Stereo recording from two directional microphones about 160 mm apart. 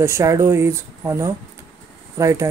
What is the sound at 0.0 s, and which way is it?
Speech, 15° right (ahead or behind).